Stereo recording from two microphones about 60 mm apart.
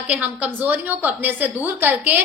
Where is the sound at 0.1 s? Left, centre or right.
Right.